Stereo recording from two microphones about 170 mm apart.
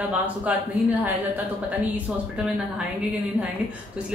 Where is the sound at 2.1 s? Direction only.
5° right (ahead or behind).